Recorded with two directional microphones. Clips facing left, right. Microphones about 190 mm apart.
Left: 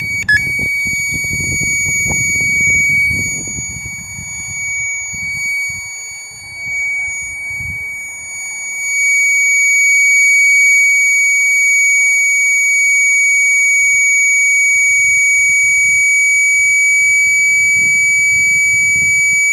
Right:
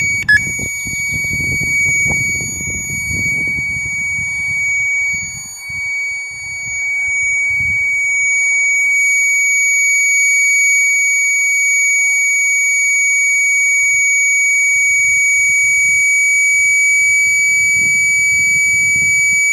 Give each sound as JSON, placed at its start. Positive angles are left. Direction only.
{"t": 1.9, "sound": "smoke detector", "side_deg": -15}
{"t": 2.6, "sound": "smoke detector", "side_deg": 15}
{"t": 8.7, "sound": "smoke detector", "side_deg": 0}